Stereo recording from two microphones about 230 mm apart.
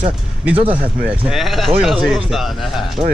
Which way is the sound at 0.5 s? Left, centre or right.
Right.